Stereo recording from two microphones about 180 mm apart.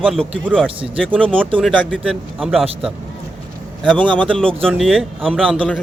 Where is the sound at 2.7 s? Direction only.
30° right (ahead or behind).